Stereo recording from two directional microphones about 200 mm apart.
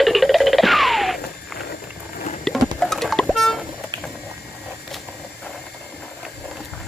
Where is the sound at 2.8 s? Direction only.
Centre (ahead or behind).